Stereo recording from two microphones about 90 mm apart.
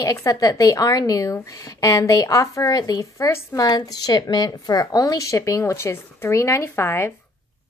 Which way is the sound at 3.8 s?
45° left (ahead or behind).